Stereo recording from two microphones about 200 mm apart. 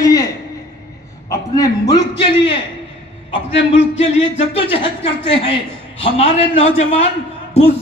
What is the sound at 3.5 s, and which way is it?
Speech, 70° left (ahead or behind).